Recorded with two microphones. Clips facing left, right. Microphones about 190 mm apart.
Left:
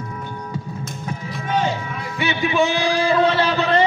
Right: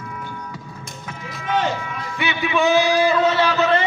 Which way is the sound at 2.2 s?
35° left (ahead or behind).